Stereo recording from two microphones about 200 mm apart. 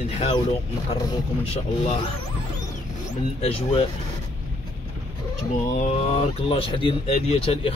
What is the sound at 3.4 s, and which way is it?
Speech, 30° left (ahead or behind).